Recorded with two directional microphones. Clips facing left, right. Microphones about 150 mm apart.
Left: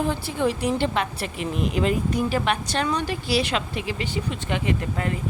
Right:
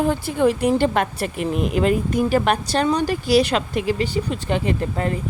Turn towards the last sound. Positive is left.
turn(degrees=-35)  # may be behind; listen again after turning